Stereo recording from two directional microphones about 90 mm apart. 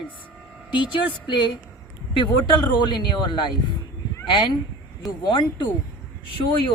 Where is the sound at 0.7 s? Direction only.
60° left (ahead or behind).